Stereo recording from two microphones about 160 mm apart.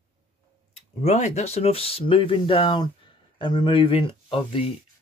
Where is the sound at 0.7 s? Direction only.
45° left (ahead or behind).